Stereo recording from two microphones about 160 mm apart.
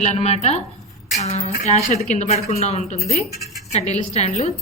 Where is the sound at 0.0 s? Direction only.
45° left (ahead or behind).